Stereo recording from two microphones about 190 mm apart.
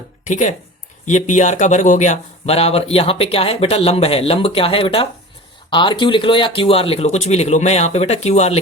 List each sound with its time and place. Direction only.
0.3 s speech: 40° left (ahead or behind)